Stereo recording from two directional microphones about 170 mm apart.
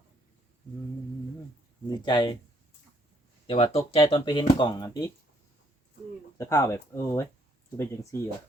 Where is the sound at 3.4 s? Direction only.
35° left (ahead or behind).